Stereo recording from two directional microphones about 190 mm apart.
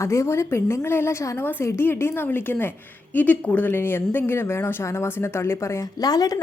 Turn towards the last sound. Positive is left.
turn(degrees=20)  # may be behind; listen again after turning